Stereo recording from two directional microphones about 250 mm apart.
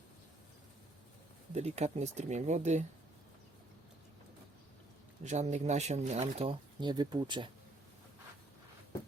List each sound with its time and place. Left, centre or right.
1.5 s speech: right
5.2 s speech: right